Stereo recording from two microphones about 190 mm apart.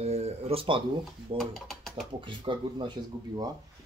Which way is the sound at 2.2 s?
25° right (ahead or behind).